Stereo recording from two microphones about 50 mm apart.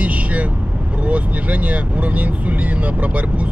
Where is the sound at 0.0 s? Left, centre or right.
Right.